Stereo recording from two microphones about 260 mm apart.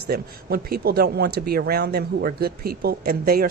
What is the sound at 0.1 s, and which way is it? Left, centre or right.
Speech, right.